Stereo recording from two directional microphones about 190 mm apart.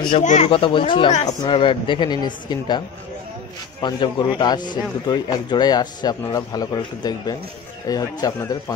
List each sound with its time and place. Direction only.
0.2 s a man's voice: 35° left (ahead or behind)
3.8 s a man's voice: 25° left (ahead or behind)